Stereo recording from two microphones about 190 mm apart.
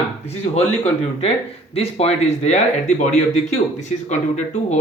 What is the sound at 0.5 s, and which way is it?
Speech, 35° left (ahead or behind).